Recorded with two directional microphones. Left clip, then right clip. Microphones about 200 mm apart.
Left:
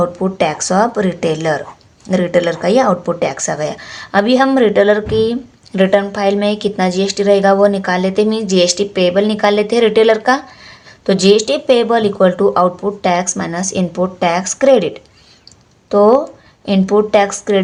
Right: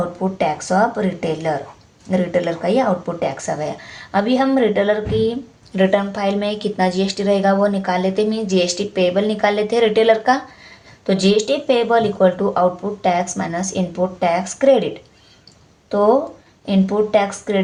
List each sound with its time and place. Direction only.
0.2 s speech: 40° left (ahead or behind)